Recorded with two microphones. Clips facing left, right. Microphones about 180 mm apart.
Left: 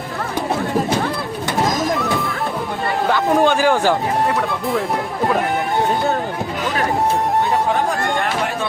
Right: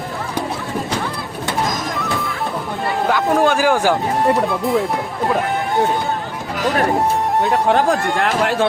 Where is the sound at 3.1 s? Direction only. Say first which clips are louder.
Even; centre (ahead or behind).